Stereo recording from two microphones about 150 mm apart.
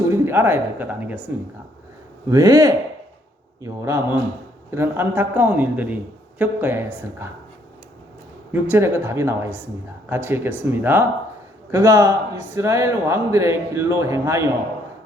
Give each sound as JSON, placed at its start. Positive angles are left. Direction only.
{"t": 0.1, "sound": "speech", "side_deg": -15}
{"t": 2.3, "sound": "a man's voice", "side_deg": -20}
{"t": 8.6, "sound": "a man's voice", "side_deg": -15}